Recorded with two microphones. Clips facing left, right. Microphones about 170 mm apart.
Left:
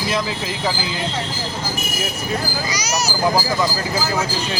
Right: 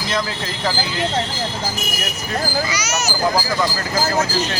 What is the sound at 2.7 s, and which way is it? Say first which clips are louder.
Speech: even; 35° left (ahead or behind).